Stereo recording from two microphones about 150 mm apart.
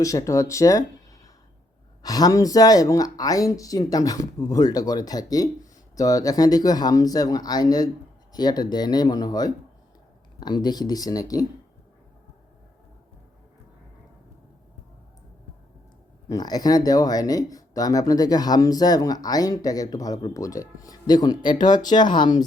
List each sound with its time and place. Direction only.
0.0 s speech: 20° left (ahead or behind)
16.3 s speech: 25° left (ahead or behind)